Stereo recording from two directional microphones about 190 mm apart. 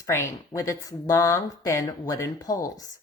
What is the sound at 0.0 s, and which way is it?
Speech, 15° left (ahead or behind).